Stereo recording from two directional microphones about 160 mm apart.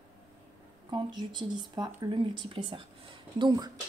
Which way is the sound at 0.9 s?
30° right (ahead or behind).